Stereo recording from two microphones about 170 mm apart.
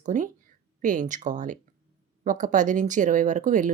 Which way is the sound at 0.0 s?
50° right (ahead or behind).